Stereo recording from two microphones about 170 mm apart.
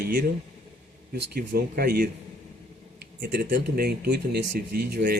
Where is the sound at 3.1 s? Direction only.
70° right (ahead or behind).